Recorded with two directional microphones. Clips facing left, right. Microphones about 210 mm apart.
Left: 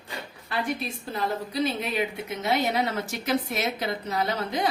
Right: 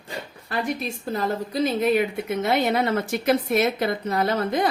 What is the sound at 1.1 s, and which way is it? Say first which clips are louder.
A woman's voice: right 3 dB; 45° right (ahead or behind).